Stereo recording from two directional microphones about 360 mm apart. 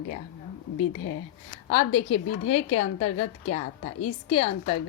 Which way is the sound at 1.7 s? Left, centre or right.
Centre.